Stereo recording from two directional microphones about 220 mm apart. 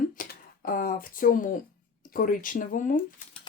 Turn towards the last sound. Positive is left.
turn(degrees=35)  # may be behind; listen again after turning